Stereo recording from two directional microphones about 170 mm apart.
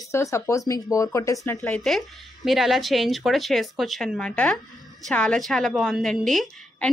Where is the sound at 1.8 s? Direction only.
Centre (ahead or behind).